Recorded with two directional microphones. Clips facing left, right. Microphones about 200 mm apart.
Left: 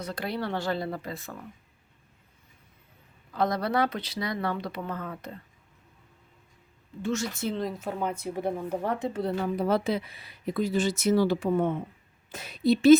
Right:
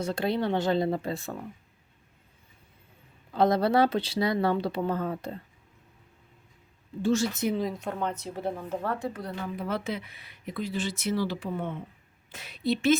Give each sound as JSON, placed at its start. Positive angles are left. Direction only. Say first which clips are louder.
{"t": 0.0, "sound": "speech", "louder": "right 5 dB", "side_deg": -25}
{"t": 3.3, "sound": "speech", "louder": "right 4 dB", "side_deg": -30}
{"t": 7.0, "sound": "speech", "louder": "right 4 dB", "side_deg": -30}
{"t": 7.5, "sound": "speech", "louder": "right 1 dB", "side_deg": 0}